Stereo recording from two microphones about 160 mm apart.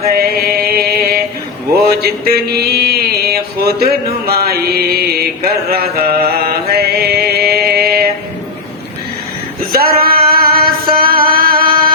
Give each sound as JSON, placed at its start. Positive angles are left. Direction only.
{"t": 0.1, "sound": "mantra", "side_deg": -75}
{"t": 4.3, "sound": "music", "side_deg": -75}
{"t": 5.7, "sound": "mantra", "side_deg": -70}
{"t": 9.7, "sound": "a sound", "side_deg": -70}